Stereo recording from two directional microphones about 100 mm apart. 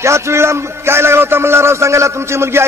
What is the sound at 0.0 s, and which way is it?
A man's voice, 30° right (ahead or behind).